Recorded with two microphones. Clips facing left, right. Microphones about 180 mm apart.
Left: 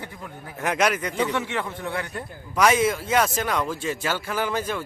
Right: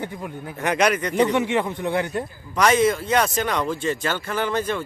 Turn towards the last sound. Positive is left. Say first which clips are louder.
# right 2 dB
turn(degrees=5)  # may be behind; listen again after turning